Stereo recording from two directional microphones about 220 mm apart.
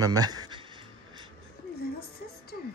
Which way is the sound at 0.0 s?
15° right (ahead or behind).